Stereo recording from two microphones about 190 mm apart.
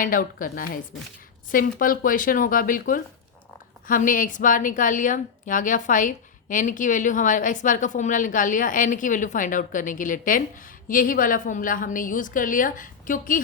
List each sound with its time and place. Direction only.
0.0 s a woman's voice: 45° left (ahead or behind)